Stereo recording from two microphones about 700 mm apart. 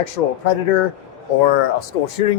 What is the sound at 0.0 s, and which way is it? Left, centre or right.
Speech, left.